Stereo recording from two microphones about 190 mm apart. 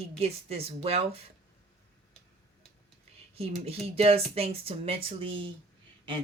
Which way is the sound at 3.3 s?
30° right (ahead or behind).